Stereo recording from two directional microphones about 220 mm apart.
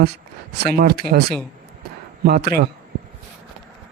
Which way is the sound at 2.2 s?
45° right (ahead or behind).